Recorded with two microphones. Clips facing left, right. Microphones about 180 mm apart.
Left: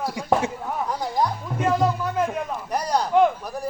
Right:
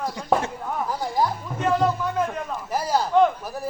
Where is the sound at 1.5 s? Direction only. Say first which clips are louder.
Even; 10° left (ahead or behind).